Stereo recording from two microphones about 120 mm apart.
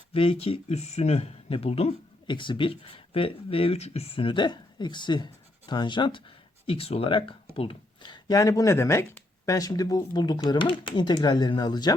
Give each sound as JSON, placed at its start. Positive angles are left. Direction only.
{"t": 0.1, "sound": "speech", "side_deg": 50}
{"t": 2.2, "sound": "speech", "side_deg": 40}
{"t": 6.7, "sound": "speech", "side_deg": 55}